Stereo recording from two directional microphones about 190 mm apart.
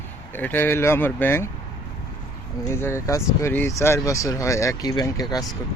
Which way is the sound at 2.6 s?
15° left (ahead or behind).